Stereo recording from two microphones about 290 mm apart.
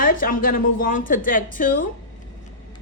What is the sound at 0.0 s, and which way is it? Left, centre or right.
Speech, left.